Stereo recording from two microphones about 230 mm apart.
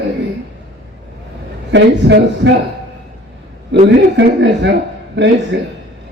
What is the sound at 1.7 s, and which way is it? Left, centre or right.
Speech, right.